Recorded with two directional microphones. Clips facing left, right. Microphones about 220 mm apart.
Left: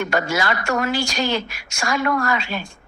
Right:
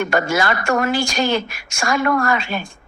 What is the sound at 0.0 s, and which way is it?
Speech, 50° right (ahead or behind).